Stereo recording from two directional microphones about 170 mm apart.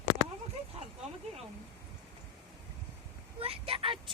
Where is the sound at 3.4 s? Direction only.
35° right (ahead or behind).